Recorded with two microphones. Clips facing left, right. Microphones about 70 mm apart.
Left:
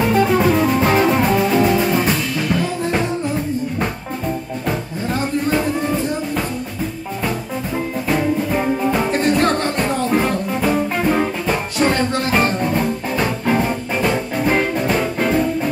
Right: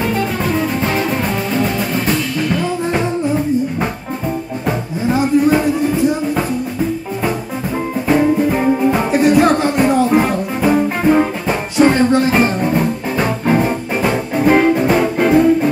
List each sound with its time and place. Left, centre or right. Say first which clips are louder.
0.0 s music: left 3 dB; centre
1.0 s music: left 3 dB; centre
4.6 s music: right 5 dB; centre
8.1 s music: right 6 dB; centre